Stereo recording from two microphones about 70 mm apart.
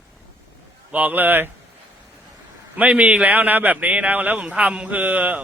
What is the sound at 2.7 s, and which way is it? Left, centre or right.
A man's voice, centre.